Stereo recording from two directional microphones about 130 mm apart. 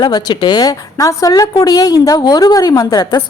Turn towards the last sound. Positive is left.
turn(degrees=30)  # may be behind; listen again after turning